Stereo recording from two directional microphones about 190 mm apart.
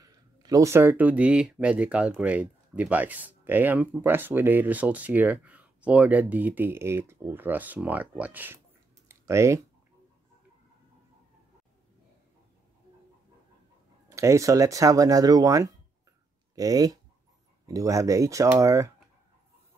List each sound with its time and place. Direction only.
0.0 s speech: 20° right (ahead or behind)
9.1 s a sound: 15° right (ahead or behind)
14.0 s speech: 15° right (ahead or behind)